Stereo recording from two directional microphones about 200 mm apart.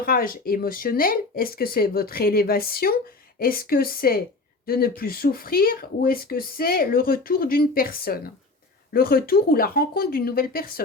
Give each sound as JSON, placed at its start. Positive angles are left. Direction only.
{"t": 0.0, "sound": "speech", "side_deg": 45}